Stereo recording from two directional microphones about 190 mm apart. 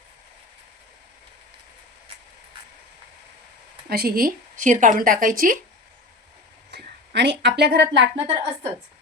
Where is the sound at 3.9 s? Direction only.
50° right (ahead or behind).